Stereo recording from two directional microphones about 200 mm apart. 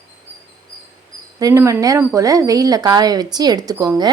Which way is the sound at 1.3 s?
15° right (ahead or behind).